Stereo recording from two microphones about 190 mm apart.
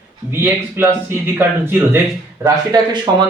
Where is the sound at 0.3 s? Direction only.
10° right (ahead or behind).